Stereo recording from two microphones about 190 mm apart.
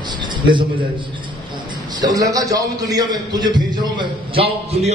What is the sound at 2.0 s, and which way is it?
A man's voice, 20° right (ahead or behind).